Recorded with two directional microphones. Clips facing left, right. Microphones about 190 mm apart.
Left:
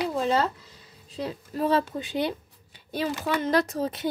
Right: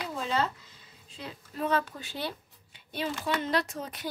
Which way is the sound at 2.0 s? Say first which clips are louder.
Left 9 dB; 20° left (ahead or behind).